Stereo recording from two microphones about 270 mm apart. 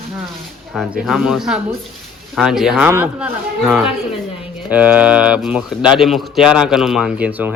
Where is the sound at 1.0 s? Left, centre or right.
Centre.